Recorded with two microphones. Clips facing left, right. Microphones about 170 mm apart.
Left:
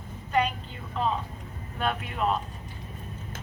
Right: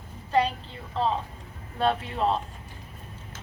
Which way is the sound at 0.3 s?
30° right (ahead or behind).